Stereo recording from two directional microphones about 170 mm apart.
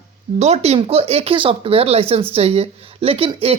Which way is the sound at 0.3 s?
40° right (ahead or behind).